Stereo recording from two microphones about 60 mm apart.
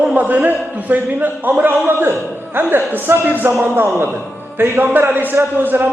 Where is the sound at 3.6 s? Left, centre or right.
Right.